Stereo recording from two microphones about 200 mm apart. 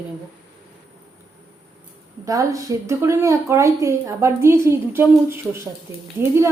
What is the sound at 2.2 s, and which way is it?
A woman's voice, 15° right (ahead or behind).